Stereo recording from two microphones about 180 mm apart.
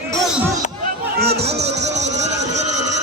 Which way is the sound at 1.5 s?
35° right (ahead or behind).